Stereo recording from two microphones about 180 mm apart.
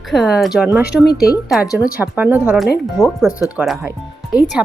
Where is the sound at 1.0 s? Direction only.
60° left (ahead or behind).